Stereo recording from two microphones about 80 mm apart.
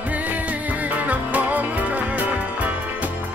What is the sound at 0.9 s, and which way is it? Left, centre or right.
Music, centre.